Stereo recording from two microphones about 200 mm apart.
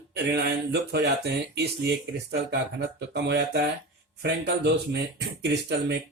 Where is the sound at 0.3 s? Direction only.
55° right (ahead or behind).